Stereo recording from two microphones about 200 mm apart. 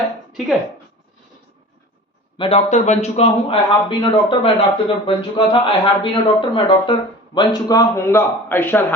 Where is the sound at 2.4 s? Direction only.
30° left (ahead or behind).